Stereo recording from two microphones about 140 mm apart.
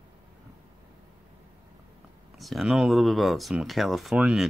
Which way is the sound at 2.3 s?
Centre (ahead or behind).